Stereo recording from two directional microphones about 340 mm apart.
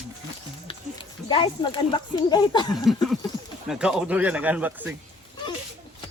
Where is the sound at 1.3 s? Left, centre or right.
Centre.